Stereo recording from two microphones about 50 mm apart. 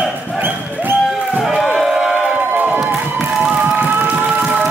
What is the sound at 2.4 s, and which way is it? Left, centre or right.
Crowd, right.